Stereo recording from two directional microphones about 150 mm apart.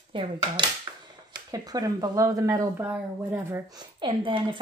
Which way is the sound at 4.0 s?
35° right (ahead or behind).